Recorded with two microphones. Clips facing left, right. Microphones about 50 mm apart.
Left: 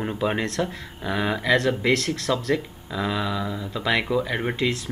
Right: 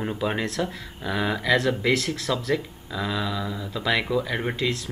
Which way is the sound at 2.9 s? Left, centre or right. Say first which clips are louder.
Left 2 dB; centre.